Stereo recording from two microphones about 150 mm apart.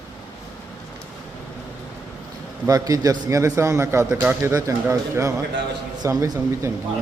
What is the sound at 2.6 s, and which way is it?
A man's voice, 25° right (ahead or behind).